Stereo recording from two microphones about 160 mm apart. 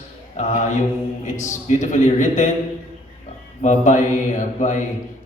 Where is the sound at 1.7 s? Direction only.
50° left (ahead or behind).